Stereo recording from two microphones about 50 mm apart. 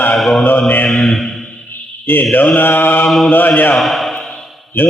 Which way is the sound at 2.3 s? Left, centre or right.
Left.